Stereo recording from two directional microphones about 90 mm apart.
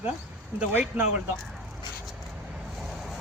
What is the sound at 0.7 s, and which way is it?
Speech, 25° right (ahead or behind).